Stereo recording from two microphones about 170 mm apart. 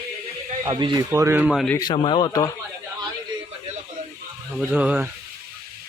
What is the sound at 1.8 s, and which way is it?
Speech, 30° left (ahead or behind).